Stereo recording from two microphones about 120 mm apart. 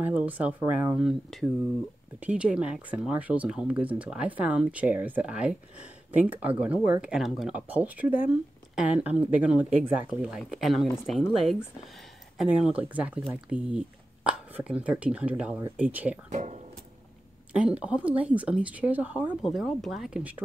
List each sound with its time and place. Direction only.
0.0 s speech: 15° right (ahead or behind)
1.0 s speech: centre (ahead or behind)
10.5 s speech: centre (ahead or behind)
16.3 s speech: 85° right
17.5 s speech: 10° right (ahead or behind)
19.4 s speech: centre (ahead or behind)